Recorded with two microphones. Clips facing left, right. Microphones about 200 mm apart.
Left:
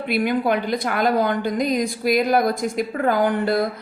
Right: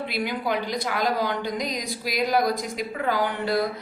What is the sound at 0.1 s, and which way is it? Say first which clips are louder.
A woman's voice: left 9 dB; 55° left (ahead or behind).